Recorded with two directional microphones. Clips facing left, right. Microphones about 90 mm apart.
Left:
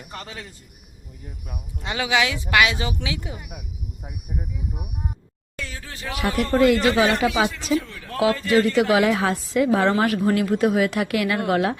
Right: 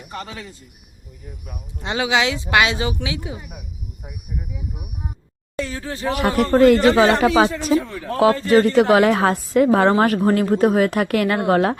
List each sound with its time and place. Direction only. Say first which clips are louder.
1.8 s speech: right 3 dB; 20° right (ahead or behind)
4.5 s speech: even; 5° right (ahead or behind)
5.5 s a man's voice: right 9 dB; 35° right (ahead or behind)
6.1 s a man's voice: right 5 dB; 45° right (ahead or behind)